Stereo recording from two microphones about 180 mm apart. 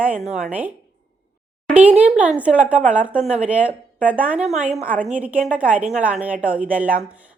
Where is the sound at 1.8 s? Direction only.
5° right (ahead or behind).